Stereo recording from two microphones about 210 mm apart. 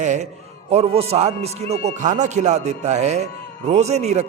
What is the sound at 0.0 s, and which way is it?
A man's voice, 35° right (ahead or behind).